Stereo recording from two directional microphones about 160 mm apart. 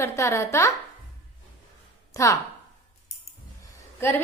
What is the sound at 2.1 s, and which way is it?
Speech, 20° left (ahead or behind).